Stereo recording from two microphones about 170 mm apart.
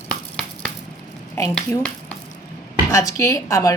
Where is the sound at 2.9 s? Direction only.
20° left (ahead or behind).